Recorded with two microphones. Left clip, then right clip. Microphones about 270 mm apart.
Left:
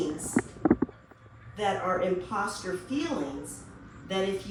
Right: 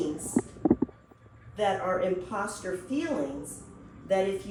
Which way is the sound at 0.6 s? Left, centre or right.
Right.